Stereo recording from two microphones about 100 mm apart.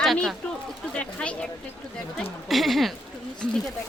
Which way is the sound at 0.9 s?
10° left (ahead or behind).